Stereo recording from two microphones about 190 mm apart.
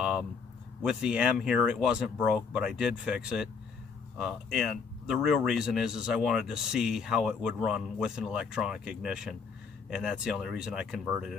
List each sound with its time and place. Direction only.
0.8 s speech: 5° right (ahead or behind)